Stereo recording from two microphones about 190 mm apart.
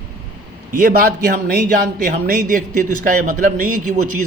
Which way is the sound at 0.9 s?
50° right (ahead or behind).